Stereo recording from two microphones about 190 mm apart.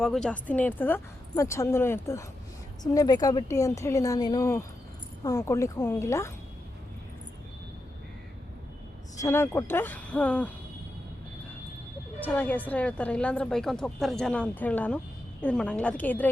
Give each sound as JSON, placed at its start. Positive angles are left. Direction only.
{"t": 0.0, "sound": "a woman's voice", "side_deg": 0}
{"t": 9.2, "sound": "a woman's voice", "side_deg": 10}
{"t": 12.2, "sound": "a woman's voice", "side_deg": 10}